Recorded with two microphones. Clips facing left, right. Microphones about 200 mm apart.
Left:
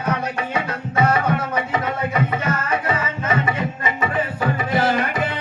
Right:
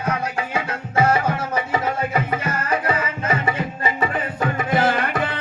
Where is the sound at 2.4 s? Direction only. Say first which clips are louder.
Even; 30° right (ahead or behind).